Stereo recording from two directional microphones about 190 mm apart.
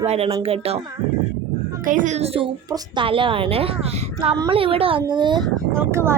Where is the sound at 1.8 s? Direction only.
45° right (ahead or behind); by 5.4 s 25° right (ahead or behind).